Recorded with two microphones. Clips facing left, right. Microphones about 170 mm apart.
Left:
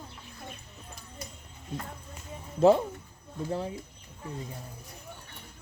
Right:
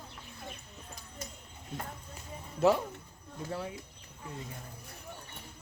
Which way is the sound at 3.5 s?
25° left (ahead or behind).